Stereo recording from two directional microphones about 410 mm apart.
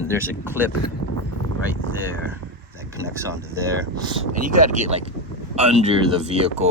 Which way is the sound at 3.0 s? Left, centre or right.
Centre.